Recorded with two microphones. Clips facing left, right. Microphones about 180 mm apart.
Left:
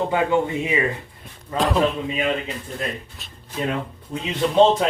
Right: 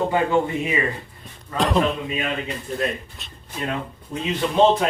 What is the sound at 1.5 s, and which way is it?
Speech, centre (ahead or behind).